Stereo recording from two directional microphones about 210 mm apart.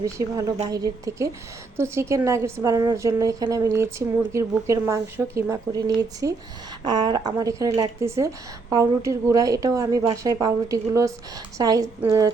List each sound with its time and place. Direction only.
0.0 s a woman's voice: 15° right (ahead or behind)